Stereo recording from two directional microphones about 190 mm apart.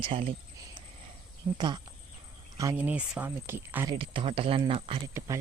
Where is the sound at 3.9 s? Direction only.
25° right (ahead or behind).